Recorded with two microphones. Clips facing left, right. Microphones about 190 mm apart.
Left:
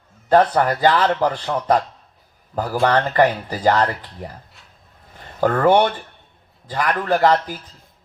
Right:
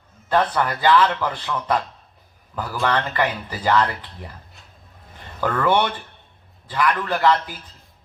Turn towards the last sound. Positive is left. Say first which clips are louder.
# left 3 dB
turn(degrees=40)  # may be behind; listen again after turning